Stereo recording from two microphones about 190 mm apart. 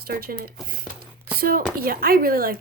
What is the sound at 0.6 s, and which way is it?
Speech, centre (ahead or behind).